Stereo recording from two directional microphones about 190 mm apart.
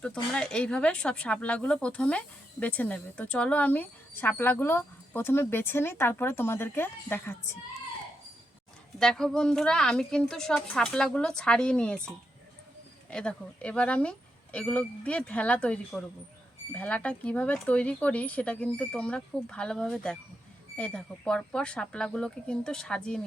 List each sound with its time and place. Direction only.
0.0 s speech: 5° left (ahead or behind)
9.0 s a woman's voice: 5° left (ahead or behind)